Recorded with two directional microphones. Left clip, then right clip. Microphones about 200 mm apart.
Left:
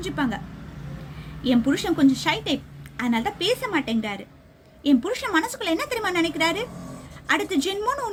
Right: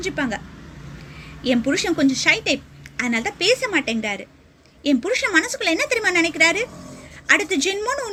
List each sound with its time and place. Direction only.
0.0 s speech: 15° left (ahead or behind)
1.5 s speech: 15° left (ahead or behind)